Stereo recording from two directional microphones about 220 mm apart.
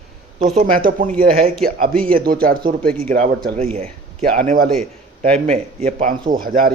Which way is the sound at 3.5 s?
30° right (ahead or behind).